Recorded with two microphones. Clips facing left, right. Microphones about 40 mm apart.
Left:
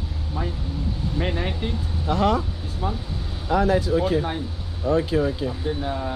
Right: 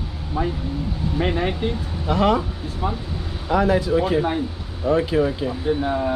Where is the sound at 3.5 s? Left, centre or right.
Right.